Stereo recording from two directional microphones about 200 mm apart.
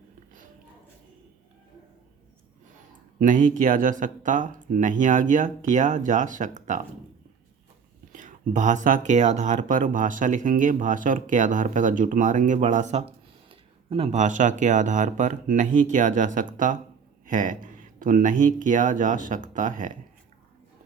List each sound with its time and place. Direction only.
3.2 s speech: 40° right (ahead or behind)
8.1 s speech: 40° right (ahead or behind)